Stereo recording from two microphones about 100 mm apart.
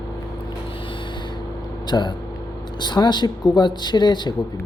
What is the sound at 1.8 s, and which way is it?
Speech, 45° left (ahead or behind).